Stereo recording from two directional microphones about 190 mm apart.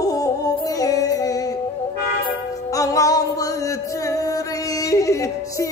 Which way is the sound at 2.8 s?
15° left (ahead or behind).